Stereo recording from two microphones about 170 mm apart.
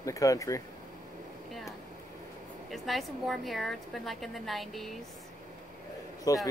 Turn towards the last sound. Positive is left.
turn(degrees=20)  # may be behind; listen again after turning